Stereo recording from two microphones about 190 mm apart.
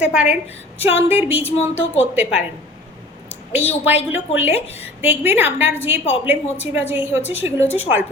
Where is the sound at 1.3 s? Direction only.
35° left (ahead or behind).